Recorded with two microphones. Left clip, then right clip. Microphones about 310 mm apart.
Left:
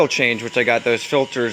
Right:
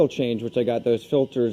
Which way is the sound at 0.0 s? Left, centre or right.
Left.